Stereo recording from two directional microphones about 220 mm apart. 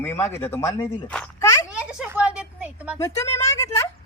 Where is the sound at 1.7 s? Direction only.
5° right (ahead or behind).